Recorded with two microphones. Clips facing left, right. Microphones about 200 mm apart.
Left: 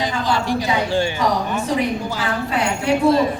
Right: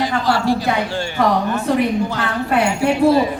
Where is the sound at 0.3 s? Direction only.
20° left (ahead or behind).